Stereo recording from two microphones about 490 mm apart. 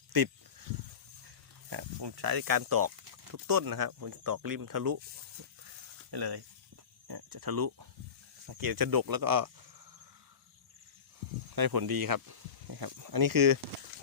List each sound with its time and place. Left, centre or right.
0.1 s speech: right
1.7 s speech: right
6.1 s speech: right
11.5 s speech: right